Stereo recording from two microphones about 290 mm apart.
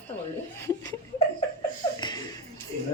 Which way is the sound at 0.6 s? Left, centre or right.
Centre.